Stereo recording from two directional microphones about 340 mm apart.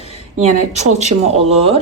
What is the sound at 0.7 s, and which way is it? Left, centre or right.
Speech, centre.